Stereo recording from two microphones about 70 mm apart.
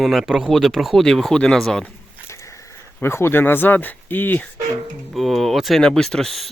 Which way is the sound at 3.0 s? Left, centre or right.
Left.